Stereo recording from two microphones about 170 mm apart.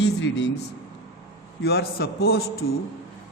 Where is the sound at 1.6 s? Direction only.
70° left (ahead or behind).